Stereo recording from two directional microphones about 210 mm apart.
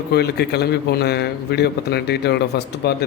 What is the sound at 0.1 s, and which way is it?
A man's voice, 50° left (ahead or behind).